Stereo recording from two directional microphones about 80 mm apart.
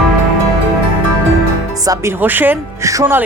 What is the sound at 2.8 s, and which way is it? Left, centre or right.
Speech, right.